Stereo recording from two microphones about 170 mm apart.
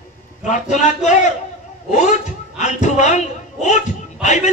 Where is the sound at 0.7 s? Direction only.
45° left (ahead or behind).